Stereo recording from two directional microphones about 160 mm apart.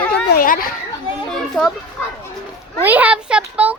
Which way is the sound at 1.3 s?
Centre (ahead or behind).